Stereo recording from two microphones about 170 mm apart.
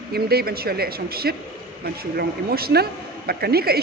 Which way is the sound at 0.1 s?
65° right (ahead or behind).